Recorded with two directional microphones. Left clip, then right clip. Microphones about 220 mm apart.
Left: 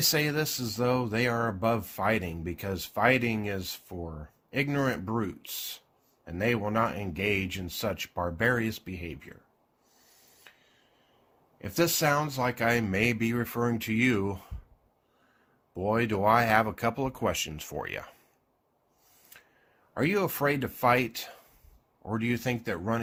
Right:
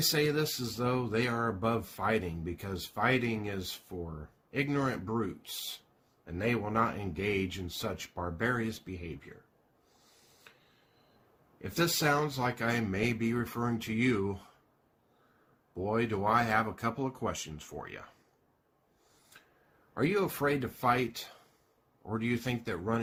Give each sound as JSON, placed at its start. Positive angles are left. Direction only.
{"t": 0.1, "sound": "speech", "side_deg": 45}
{"t": 6.2, "sound": "speech", "side_deg": 45}
{"t": 10.5, "sound": "a sound", "side_deg": 40}
{"t": 11.7, "sound": "speech", "side_deg": 45}
{"t": 15.7, "sound": "speech", "side_deg": 45}
{"t": 19.9, "sound": "speech", "side_deg": 45}